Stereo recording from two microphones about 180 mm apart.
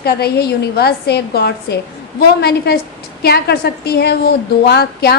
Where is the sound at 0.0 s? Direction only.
60° left (ahead or behind).